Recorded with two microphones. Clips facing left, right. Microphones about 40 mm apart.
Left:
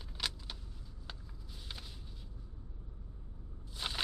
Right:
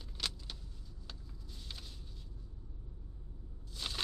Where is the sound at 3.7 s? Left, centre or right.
Centre.